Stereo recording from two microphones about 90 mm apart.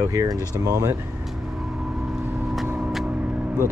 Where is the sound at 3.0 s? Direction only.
15° right (ahead or behind).